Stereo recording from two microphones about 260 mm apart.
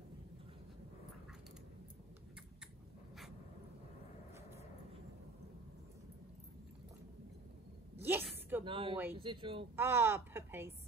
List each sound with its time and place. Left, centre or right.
8.0 s a sound: centre
8.6 s speech: centre
9.8 s a woman's voice: centre